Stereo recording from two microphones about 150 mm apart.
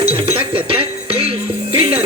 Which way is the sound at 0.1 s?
40° right (ahead or behind).